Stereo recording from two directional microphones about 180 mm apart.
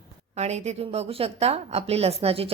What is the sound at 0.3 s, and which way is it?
A woman's voice, 35° right (ahead or behind).